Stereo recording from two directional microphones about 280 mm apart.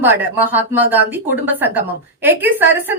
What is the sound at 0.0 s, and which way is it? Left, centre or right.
A woman's voice, centre.